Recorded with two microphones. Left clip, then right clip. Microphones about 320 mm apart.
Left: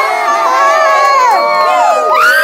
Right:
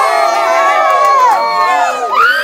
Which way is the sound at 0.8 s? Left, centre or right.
Left.